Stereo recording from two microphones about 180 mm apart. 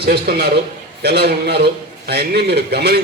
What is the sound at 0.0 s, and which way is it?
A man's voice, 65° right (ahead or behind).